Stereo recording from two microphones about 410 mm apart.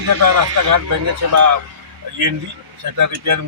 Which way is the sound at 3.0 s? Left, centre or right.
Right.